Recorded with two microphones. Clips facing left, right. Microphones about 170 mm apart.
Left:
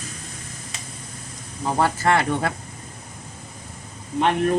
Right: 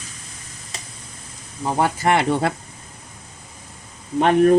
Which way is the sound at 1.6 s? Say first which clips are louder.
Right 1 dB; 15° right (ahead or behind).